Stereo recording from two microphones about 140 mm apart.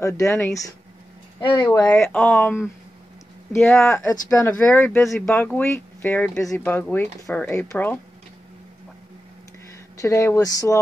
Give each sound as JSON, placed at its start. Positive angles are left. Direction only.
{"t": 0.0, "sound": "speech", "side_deg": 20}
{"t": 1.4, "sound": "speech", "side_deg": 35}
{"t": 2.0, "sound": "speech", "side_deg": 5}
{"t": 9.9, "sound": "speech", "side_deg": 20}